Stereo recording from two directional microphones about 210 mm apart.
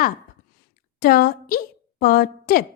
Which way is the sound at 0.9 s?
45° left (ahead or behind).